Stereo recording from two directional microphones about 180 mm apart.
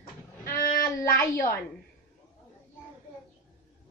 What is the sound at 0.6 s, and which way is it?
Child singing, 50° left (ahead or behind).